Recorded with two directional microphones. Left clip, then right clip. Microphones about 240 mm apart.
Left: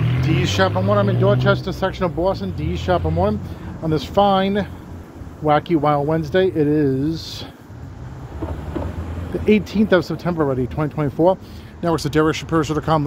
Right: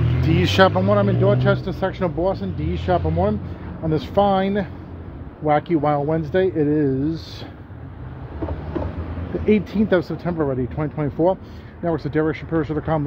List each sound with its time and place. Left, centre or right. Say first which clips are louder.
0.4 s speech: right 4 dB; right
0.7 s speech: even; centre
9.5 s speech: left 2 dB; centre